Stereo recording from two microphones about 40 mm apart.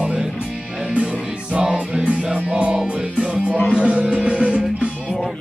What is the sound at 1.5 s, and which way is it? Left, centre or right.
Music, right.